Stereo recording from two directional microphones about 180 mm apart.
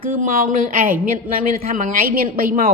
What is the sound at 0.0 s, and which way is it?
A woman's voice, 50° right (ahead or behind).